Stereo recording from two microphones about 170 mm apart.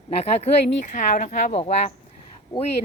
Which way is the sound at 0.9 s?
50° left (ahead or behind).